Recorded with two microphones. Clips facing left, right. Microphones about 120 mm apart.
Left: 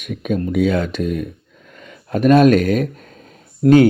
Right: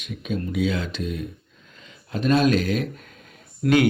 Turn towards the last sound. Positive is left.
turn(degrees=35)  # may be behind; listen again after turning